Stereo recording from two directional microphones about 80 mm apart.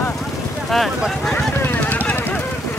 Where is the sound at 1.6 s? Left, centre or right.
Left.